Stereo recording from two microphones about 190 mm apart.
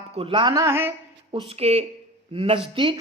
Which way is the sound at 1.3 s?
30° right (ahead or behind).